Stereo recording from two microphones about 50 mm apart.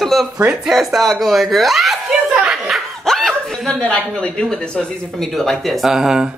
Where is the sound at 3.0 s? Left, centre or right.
Centre.